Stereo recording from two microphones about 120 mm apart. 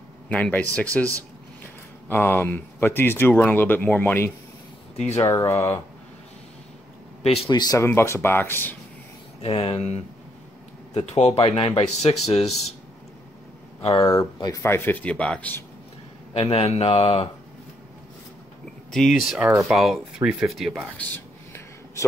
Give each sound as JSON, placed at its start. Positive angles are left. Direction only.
{"t": 0.3, "sound": "speech", "side_deg": 10}
{"t": 2.0, "sound": "speech", "side_deg": 15}
{"t": 7.4, "sound": "speech", "side_deg": 30}
{"t": 7.8, "sound": "speech", "side_deg": 20}
{"t": 9.4, "sound": "speech", "side_deg": 50}
{"t": 11.1, "sound": "speech", "side_deg": 65}
{"t": 13.9, "sound": "speech", "side_deg": 35}
{"t": 16.3, "sound": "speech", "side_deg": 55}
{"t": 18.9, "sound": "speech", "side_deg": 5}
{"t": 21.0, "sound": "a sound", "side_deg": 20}